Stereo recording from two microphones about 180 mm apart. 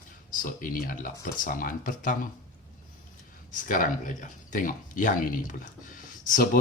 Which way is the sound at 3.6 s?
45° left (ahead or behind).